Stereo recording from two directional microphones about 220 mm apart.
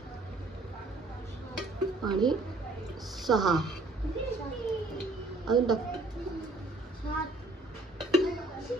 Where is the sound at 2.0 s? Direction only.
20° right (ahead or behind).